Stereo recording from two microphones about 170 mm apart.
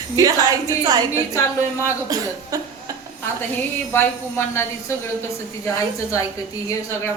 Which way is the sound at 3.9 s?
15° left (ahead or behind).